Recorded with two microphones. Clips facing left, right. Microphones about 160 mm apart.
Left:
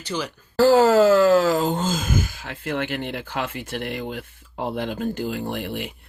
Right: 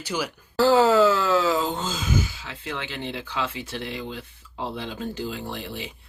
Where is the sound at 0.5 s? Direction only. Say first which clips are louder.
Left 3 dB; 45° left (ahead or behind).